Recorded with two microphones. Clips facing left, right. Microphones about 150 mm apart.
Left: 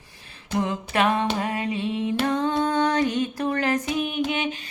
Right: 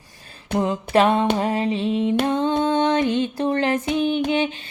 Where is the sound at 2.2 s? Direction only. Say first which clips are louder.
Right 3 dB; 25° right (ahead or behind).